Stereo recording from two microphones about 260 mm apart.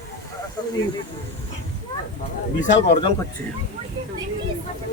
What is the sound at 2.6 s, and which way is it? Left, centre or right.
Speech, left.